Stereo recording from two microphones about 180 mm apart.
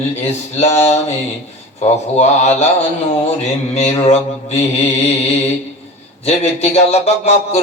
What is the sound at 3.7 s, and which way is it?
Speech, 40° left (ahead or behind).